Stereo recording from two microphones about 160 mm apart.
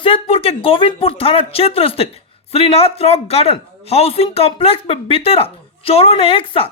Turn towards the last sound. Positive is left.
turn(degrees=35)  # may be behind; listen again after turning